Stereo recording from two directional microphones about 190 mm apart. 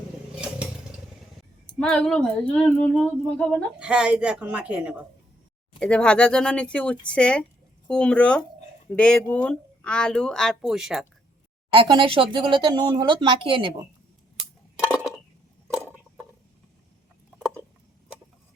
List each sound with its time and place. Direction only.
0.4 s vehicle: 5° right (ahead or behind)
1.4 s speech: 5° left (ahead or behind)
5.8 s speech: 5° left (ahead or behind)
11.7 s speech: 25° right (ahead or behind)
14.8 s a sound: centre (ahead or behind)
15.6 s a sound: 10° right (ahead or behind)